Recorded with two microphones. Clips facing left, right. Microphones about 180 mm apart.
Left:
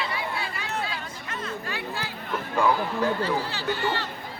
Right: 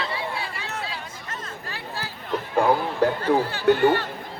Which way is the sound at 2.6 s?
50° right (ahead or behind).